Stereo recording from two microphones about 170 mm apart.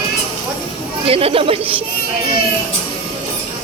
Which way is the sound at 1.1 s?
35° right (ahead or behind).